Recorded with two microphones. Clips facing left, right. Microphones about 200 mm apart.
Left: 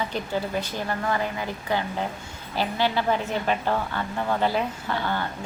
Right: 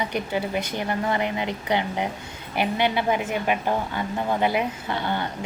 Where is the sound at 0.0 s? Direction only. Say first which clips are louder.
Right 2 dB; 15° right (ahead or behind).